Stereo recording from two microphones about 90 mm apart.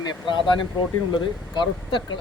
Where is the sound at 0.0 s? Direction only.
55° left (ahead or behind).